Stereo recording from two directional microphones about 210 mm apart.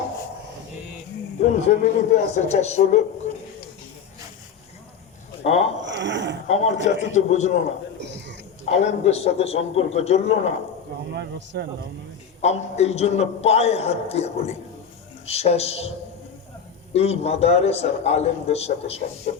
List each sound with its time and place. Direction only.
1.4 s a man's voice: 30° left (ahead or behind)
5.5 s a man's voice: 30° left (ahead or behind)
5.8 s a sound: 60° right (ahead or behind)
6.5 s a man's voice: 30° left (ahead or behind)
8.0 s a sound: 55° right (ahead or behind)
8.7 s a man's voice: 30° left (ahead or behind)
11.1 s speech: 55° right (ahead or behind)
12.4 s a man's voice: 30° left (ahead or behind)
16.9 s a man's voice: 30° left (ahead or behind)